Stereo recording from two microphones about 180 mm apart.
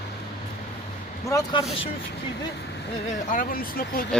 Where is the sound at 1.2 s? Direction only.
20° left (ahead or behind).